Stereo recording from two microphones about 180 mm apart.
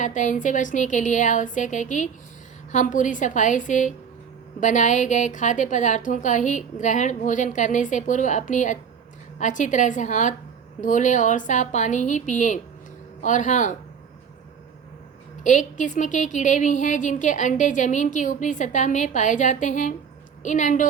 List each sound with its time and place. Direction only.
0.0 s a woman's voice: 45° left (ahead or behind)
15.4 s a woman's voice: 45° left (ahead or behind)